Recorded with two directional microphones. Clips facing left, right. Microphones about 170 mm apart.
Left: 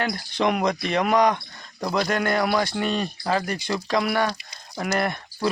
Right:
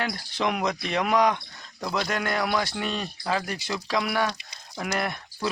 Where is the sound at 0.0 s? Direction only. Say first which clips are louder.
Left 4 dB; centre (ahead or behind).